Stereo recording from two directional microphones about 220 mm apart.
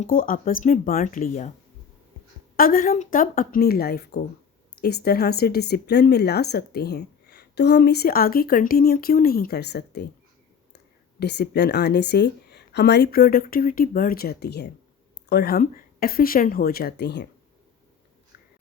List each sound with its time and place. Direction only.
0.0 s speech: 40° left (ahead or behind)
2.6 s a woman's voice: 40° left (ahead or behind)
11.2 s a woman's voice: 50° left (ahead or behind)